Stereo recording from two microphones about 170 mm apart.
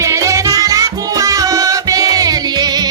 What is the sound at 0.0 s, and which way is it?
Music, 20° right (ahead or behind).